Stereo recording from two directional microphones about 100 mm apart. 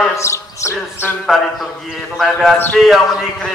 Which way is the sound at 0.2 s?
30° left (ahead or behind).